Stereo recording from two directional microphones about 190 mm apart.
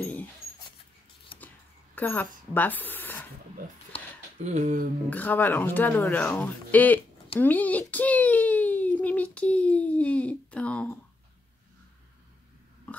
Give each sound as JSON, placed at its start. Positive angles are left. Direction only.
{"t": 0.0, "sound": "dog", "side_deg": 10}
{"t": 1.3, "sound": "a sound", "side_deg": 25}
{"t": 2.0, "sound": "a woman's voice", "side_deg": 10}
{"t": 4.4, "sound": "speech", "side_deg": -40}
{"t": 5.1, "sound": "a child's voice", "side_deg": 10}